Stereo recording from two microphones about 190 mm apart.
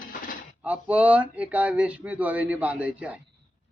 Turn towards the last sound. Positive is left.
turn(degrees=-5)  # may be behind; listen again after turning